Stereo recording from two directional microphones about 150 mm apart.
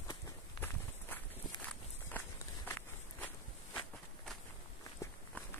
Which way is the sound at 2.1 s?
15° left (ahead or behind).